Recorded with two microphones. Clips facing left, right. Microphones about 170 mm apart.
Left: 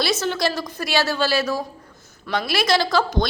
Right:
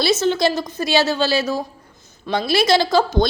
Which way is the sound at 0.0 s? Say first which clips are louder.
Right 5 dB; 25° right (ahead or behind).